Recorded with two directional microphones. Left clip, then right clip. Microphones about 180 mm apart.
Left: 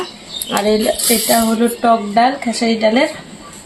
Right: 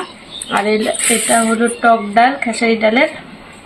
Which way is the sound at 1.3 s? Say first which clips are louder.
Right 1 dB; 5° left (ahead or behind).